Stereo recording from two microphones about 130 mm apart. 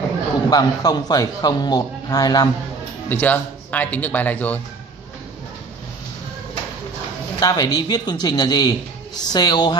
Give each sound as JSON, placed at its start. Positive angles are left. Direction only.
{"t": 0.5, "sound": "a man's voice", "side_deg": 30}
{"t": 3.1, "sound": "speech", "side_deg": 15}
{"t": 7.3, "sound": "a man's voice", "side_deg": 30}